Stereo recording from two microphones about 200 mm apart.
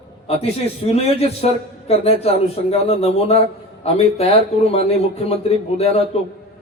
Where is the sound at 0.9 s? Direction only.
30° left (ahead or behind).